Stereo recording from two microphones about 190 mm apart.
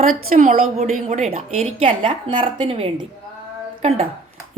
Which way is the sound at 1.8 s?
25° right (ahead or behind).